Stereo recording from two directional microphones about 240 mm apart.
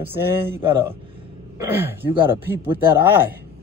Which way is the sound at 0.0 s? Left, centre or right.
Centre.